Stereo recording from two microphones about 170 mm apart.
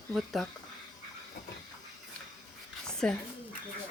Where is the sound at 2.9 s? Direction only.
5° left (ahead or behind).